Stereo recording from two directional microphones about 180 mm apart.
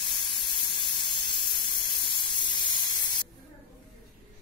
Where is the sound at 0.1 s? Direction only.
25° left (ahead or behind).